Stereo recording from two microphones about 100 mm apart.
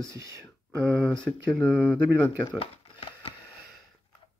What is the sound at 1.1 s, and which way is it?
Speech, 10° left (ahead or behind).